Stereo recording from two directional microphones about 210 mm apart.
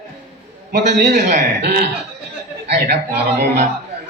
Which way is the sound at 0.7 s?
55° right (ahead or behind).